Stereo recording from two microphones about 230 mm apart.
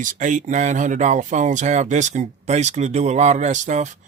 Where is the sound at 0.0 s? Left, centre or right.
Right.